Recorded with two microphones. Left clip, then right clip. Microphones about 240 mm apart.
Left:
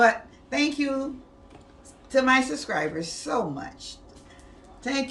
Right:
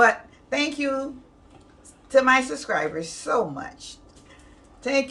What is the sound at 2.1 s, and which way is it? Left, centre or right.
Speech, centre.